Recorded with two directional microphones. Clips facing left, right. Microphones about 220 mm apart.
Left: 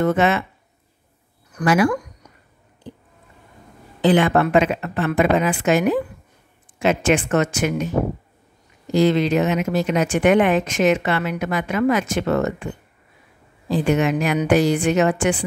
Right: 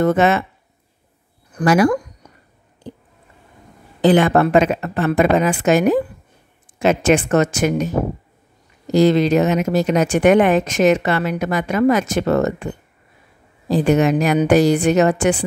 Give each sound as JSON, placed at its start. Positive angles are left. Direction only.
{"t": 0.0, "sound": "speech", "side_deg": -40}
{"t": 1.6, "sound": "speech", "side_deg": -40}
{"t": 4.0, "sound": "speech", "side_deg": -40}
{"t": 8.9, "sound": "speech", "side_deg": -40}